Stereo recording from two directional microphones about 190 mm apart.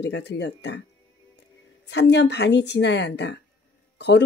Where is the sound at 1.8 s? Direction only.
65° left (ahead or behind).